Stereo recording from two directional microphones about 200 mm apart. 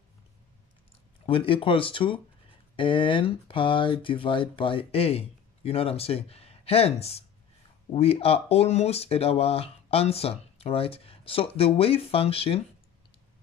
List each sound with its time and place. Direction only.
1.2 s speech: 25° left (ahead or behind)